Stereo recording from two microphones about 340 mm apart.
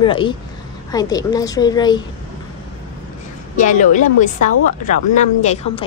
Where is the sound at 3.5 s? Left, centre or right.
Left.